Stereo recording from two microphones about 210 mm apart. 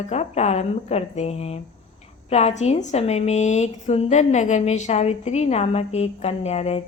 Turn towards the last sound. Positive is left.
turn(degrees=30)  # may be behind; listen again after turning